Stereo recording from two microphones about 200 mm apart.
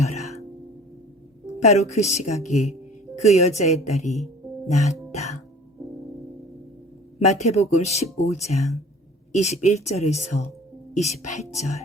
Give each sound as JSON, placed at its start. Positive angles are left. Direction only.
{"t": 0.0, "sound": "music", "side_deg": 35}
{"t": 1.6, "sound": "speech", "side_deg": 35}
{"t": 7.3, "sound": "speech", "side_deg": 35}